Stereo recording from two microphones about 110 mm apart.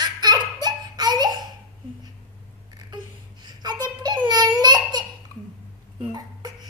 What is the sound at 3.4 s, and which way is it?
Babbling, 40° right (ahead or behind).